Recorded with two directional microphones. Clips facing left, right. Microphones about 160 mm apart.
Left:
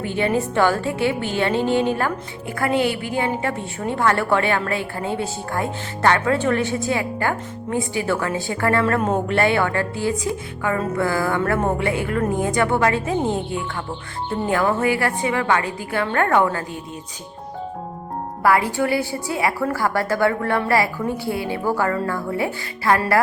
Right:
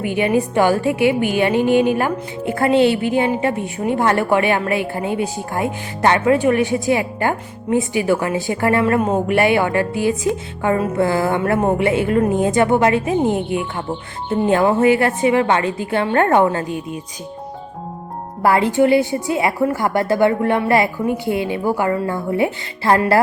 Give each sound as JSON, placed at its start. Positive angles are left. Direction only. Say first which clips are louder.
{"t": 0.0, "sound": "a woman's voice", "louder": "right 4 dB", "side_deg": -15}
{"t": 18.4, "sound": "a woman's voice", "louder": "right 5 dB", "side_deg": -25}